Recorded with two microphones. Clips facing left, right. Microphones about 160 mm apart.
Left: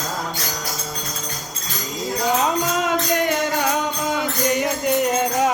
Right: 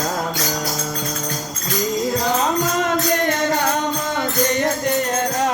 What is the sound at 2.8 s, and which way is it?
Music, 10° left (ahead or behind).